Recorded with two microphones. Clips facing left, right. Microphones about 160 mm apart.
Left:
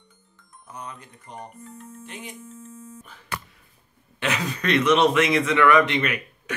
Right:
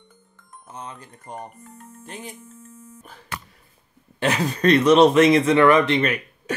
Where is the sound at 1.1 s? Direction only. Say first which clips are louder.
Right 4 dB; 45° right (ahead or behind).